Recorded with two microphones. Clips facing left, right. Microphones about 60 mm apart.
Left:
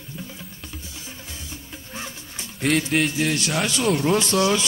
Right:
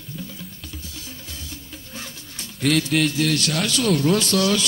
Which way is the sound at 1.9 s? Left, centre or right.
Left.